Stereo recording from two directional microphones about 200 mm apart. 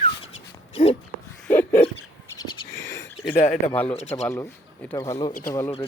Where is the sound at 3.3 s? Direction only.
35° left (ahead or behind).